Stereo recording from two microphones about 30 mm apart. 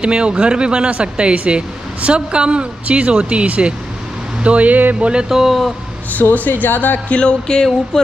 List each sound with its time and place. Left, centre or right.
0.0 s speech: right
0.9 s speech: right
4.4 s speech: right
4.9 s speech: right
5.3 s speech: centre
6.1 s speech: left
7.2 s a sound: left